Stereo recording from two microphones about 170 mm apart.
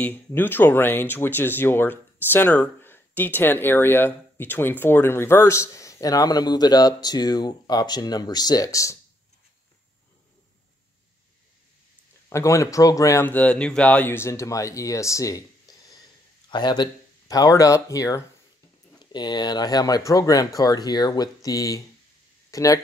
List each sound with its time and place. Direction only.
0.0 s speech: 10° left (ahead or behind)
12.3 s speech: 15° left (ahead or behind)
15.7 s a sound: 20° left (ahead or behind)
16.4 s speech: 25° left (ahead or behind)